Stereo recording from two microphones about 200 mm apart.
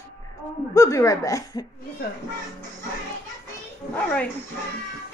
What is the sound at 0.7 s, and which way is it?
Speech, 15° left (ahead or behind).